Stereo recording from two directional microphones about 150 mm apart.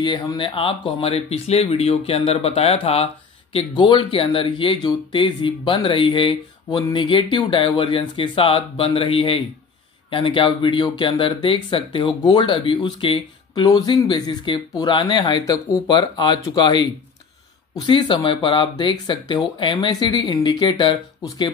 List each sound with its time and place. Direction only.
0.0 s speech: 30° left (ahead or behind)